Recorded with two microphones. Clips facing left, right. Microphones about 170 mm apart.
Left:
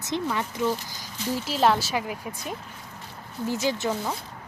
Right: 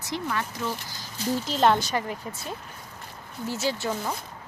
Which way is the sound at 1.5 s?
5° left (ahead or behind).